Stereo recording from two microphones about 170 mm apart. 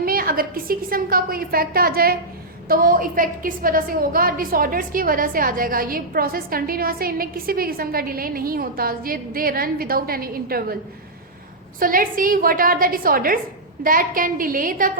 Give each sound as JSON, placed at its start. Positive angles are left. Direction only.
{"t": 0.0, "sound": "a woman's voice", "side_deg": -60}
{"t": 11.8, "sound": "a woman's voice", "side_deg": -55}